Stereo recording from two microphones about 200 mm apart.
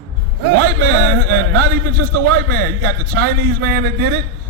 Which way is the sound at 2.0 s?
50° right (ahead or behind).